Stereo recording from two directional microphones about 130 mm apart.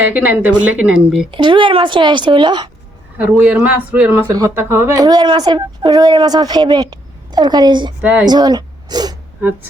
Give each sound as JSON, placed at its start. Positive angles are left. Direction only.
{"t": 0.0, "sound": "speech", "side_deg": -15}
{"t": 1.3, "sound": "a woman's voice", "side_deg": -40}
{"t": 3.2, "sound": "speech", "side_deg": -15}
{"t": 5.0, "sound": "a woman's voice", "side_deg": -35}